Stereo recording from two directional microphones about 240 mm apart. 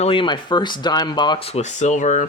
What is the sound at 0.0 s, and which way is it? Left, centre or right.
Speech, left.